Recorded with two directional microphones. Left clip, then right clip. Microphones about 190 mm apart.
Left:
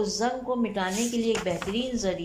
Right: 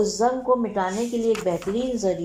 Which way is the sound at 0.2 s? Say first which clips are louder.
Right 7 dB; 10° right (ahead or behind).